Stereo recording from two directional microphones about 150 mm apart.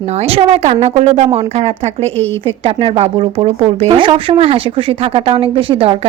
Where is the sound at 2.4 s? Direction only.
35° right (ahead or behind).